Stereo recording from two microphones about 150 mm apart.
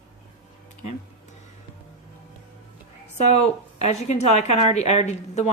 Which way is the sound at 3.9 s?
50° left (ahead or behind).